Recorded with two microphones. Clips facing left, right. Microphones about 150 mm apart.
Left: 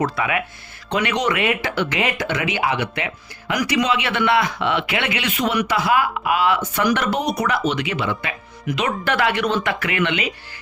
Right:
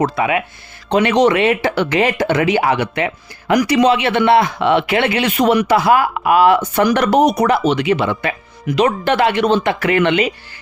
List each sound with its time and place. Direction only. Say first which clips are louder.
0.0 s speech: right 5 dB; 25° right (ahead or behind)